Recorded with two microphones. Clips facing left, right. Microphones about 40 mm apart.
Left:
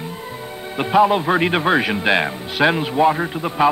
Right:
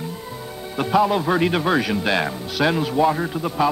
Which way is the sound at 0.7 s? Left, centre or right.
Left.